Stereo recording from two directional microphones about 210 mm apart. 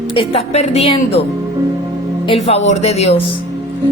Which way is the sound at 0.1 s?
25° left (ahead or behind).